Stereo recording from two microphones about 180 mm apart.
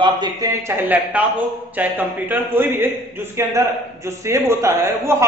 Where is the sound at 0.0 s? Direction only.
20° right (ahead or behind).